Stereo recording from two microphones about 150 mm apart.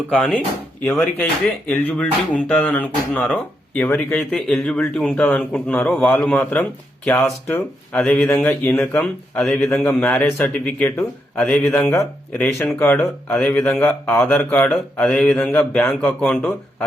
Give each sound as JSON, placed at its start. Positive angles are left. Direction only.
{"t": 0.3, "sound": "speech", "side_deg": 10}
{"t": 11.7, "sound": "speech", "side_deg": 15}